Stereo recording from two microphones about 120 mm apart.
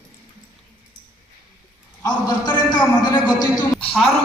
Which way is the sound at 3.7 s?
5° left (ahead or behind).